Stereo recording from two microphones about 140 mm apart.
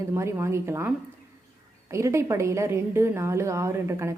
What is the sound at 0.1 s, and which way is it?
A woman's voice, 20° right (ahead or behind).